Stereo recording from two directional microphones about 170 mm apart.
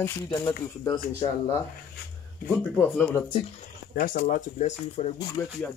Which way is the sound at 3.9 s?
55° left (ahead or behind).